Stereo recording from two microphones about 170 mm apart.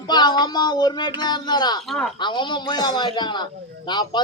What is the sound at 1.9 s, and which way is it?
Speech, centre (ahead or behind).